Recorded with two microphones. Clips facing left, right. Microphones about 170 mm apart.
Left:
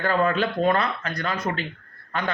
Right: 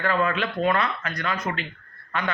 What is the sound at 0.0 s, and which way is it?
A man's voice, 35° left (ahead or behind).